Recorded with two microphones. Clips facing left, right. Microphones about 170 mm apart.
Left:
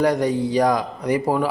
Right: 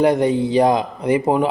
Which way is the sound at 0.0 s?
25° right (ahead or behind).